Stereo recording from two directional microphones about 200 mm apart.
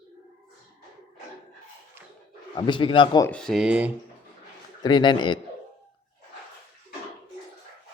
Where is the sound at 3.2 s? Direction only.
5° left (ahead or behind).